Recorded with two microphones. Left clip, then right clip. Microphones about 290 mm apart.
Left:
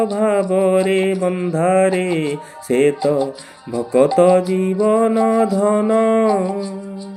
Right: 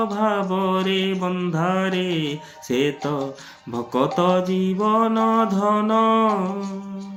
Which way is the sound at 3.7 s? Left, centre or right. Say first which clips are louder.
Left 7 dB; centre.